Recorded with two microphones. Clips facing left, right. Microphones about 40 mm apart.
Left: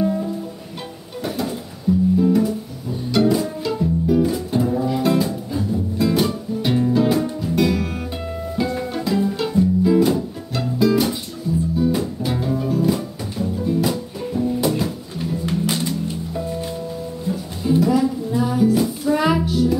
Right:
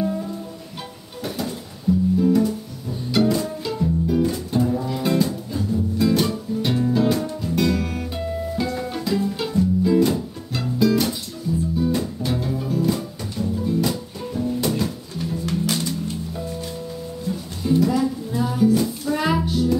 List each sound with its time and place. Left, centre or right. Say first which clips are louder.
1.2 s a sound: left 3 dB; centre
2.1 s guitar: even; centre
3.1 s music: left 2 dB; centre
15.4 s music: left 2 dB; left
17.3 s music: left 2 dB; centre